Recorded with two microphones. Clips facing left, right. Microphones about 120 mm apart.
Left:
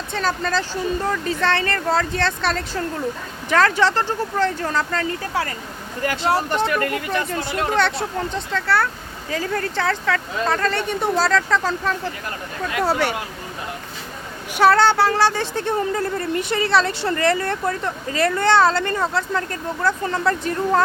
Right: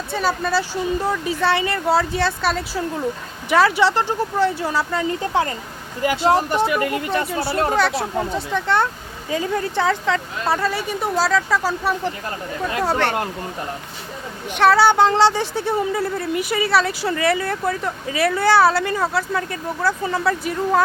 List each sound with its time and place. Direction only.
0.1 s speech: 10° right (ahead or behind)
7.3 s speech: 10° right (ahead or behind)
12.8 s speech: 5° left (ahead or behind)
14.5 s speech: centre (ahead or behind)
14.8 s speech: 15° right (ahead or behind)